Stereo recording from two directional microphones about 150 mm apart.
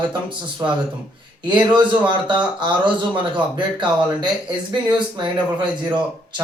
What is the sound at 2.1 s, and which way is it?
Speech, 30° right (ahead or behind).